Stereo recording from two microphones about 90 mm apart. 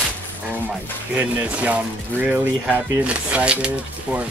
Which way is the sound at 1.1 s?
15° right (ahead or behind).